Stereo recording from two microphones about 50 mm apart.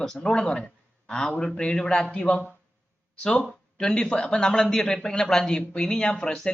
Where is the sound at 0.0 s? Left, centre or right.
Centre.